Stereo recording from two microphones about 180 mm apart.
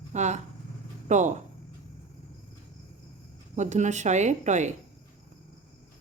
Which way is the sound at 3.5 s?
40° right (ahead or behind).